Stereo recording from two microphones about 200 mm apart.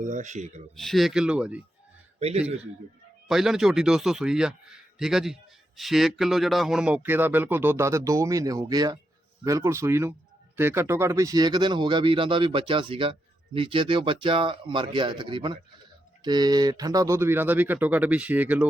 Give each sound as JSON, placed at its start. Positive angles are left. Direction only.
{"t": 0.0, "sound": "speech", "side_deg": -40}
{"t": 0.8, "sound": "speech", "side_deg": 0}
{"t": 2.1, "sound": "a man's voice", "side_deg": -30}
{"t": 3.2, "sound": "a man's voice", "side_deg": 0}